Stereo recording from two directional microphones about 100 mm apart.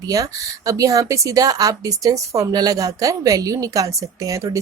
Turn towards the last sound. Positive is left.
turn(degrees=-30)  # may be behind; listen again after turning